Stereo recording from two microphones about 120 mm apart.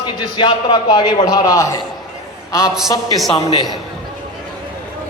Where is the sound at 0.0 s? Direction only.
40° left (ahead or behind).